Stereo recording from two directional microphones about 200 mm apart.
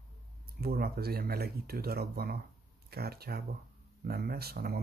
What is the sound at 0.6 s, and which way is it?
Speech, 50° right (ahead or behind).